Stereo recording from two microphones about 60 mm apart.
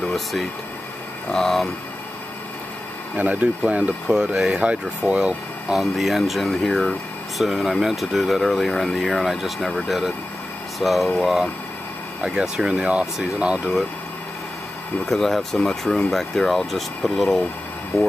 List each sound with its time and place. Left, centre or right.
0.0 s speech: centre
3.2 s speech: right
5.8 s speech: centre
12.2 s speech: centre
15.0 s speech: centre